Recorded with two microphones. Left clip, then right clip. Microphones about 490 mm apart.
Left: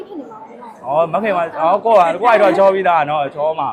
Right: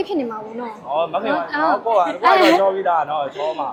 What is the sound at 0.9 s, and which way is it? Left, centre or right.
A man's voice, left.